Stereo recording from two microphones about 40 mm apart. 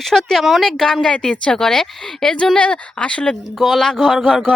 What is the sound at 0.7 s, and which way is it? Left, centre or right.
Speech, centre.